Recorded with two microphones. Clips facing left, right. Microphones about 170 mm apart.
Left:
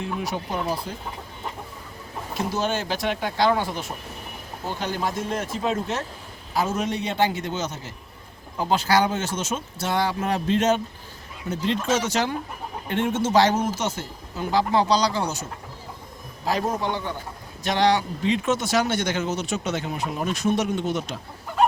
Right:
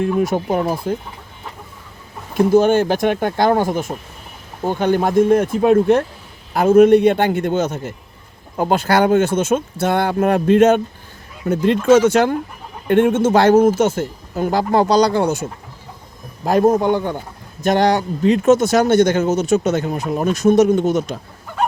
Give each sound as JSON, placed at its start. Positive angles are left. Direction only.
{"t": 0.0, "sound": "speech", "side_deg": -50}
{"t": 2.3, "sound": "speech", "side_deg": -55}